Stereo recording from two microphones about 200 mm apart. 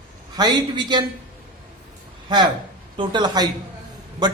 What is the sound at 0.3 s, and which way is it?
Speech, 20° right (ahead or behind).